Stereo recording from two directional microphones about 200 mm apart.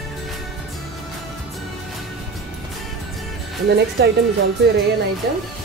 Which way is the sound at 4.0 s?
55° right (ahead or behind).